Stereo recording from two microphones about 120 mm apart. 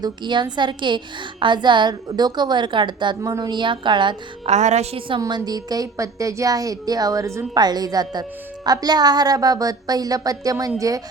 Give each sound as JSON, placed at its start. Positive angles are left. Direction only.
{"t": 0.0, "sound": "a woman's voice", "side_deg": -40}
{"t": 4.4, "sound": "a woman's voice", "side_deg": -70}
{"t": 5.2, "sound": "a woman's voice", "side_deg": -30}